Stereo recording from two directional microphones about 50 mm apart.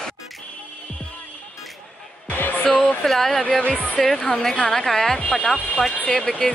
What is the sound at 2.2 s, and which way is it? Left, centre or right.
Music, left.